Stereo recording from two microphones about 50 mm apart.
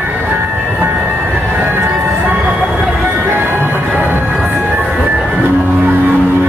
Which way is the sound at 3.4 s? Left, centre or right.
Right.